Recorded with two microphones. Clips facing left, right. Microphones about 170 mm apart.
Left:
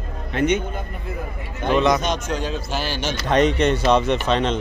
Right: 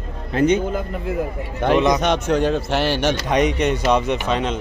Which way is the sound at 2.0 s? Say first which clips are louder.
Right 6 dB; 60° right (ahead or behind).